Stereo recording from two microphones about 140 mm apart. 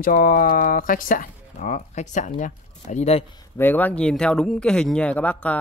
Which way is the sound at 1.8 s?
60° left (ahead or behind).